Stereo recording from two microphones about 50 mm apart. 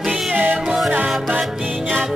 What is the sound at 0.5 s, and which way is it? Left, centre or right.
Music, centre.